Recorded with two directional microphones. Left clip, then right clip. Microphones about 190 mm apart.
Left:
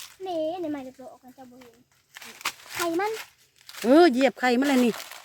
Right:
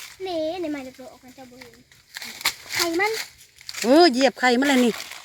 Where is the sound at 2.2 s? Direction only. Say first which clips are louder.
Right 7 dB; 5° right (ahead or behind).